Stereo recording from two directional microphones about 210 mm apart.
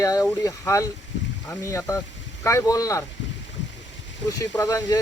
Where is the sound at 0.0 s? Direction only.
15° left (ahead or behind).